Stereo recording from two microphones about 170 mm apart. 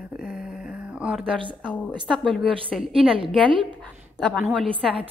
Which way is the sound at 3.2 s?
30° right (ahead or behind).